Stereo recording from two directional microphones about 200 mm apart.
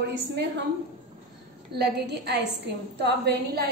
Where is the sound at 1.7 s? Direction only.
55° right (ahead or behind).